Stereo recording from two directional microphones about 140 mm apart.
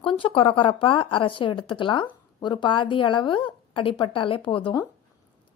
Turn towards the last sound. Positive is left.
turn(degrees=35)  # may be behind; listen again after turning